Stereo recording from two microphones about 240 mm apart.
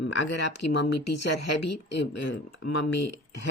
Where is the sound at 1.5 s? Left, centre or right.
Left.